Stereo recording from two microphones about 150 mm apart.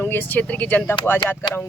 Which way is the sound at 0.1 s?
15° left (ahead or behind).